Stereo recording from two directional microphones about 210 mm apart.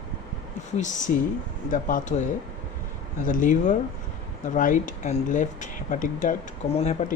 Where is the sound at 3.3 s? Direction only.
40° left (ahead or behind).